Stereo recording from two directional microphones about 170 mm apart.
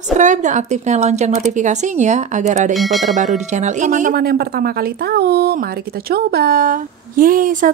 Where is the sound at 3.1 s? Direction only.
45° right (ahead or behind).